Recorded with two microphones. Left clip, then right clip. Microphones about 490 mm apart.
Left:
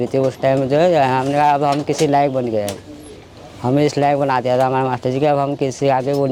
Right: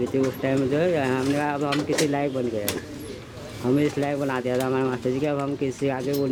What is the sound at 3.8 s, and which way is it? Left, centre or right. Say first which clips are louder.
Speech: left 14 dB; left.